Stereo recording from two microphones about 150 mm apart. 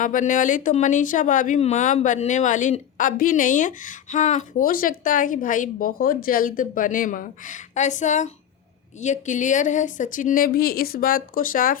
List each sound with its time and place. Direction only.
0.0 s speech: 60° left (ahead or behind)